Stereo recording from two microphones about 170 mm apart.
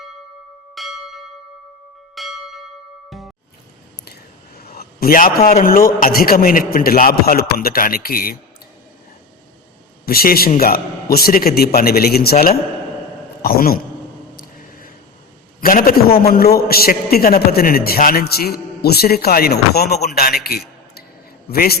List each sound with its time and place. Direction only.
0.8 s church bell: centre (ahead or behind)
4.0 s a sound: 65° left (ahead or behind)
6.0 s a man's voice: 60° left (ahead or behind)
10.1 s a man's voice: 65° left (ahead or behind)
15.6 s a man's voice: 60° left (ahead or behind)